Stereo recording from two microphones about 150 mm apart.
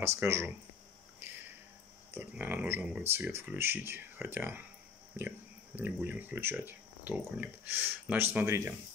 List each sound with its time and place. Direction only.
0.0 s speech: 20° right (ahead or behind)
2.1 s speech: 15° right (ahead or behind)
5.8 s speech: 10° right (ahead or behind)